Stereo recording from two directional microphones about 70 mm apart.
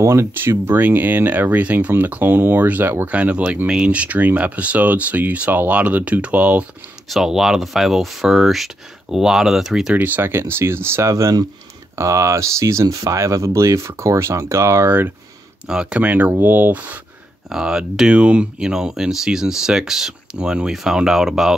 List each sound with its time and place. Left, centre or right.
0.0 s speech: right
3.1 s speech: centre
7.1 s speech: centre
9.9 s speech: right
14.9 s speech: right
15.6 s speech: centre
16.0 s speech: right
17.5 s speech: centre